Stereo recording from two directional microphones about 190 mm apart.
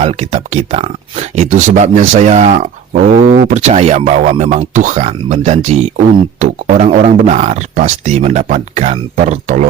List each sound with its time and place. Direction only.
0.0 s speech: 35° right (ahead or behind)